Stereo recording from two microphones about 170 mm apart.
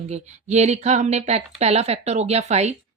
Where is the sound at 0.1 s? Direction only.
40° right (ahead or behind).